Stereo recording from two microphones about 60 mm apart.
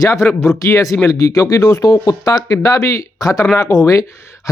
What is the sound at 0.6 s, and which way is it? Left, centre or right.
Speech, left.